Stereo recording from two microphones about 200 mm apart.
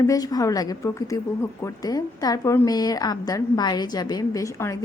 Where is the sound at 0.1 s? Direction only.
20° left (ahead or behind).